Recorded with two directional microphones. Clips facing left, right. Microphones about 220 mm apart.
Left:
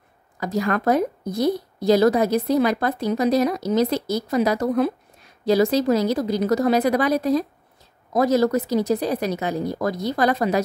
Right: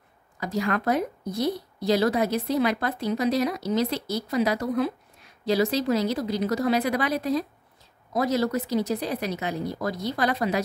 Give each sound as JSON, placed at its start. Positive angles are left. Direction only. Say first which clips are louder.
{"t": 0.4, "sound": "a woman's voice", "louder": "left 4 dB", "side_deg": 45}